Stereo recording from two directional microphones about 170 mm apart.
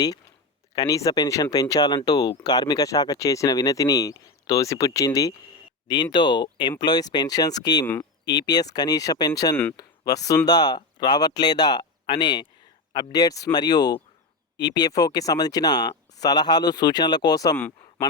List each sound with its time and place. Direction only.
0.8 s speech: 20° left (ahead or behind)